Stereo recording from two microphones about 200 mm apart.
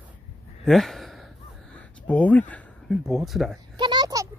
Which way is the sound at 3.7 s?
20° right (ahead or behind).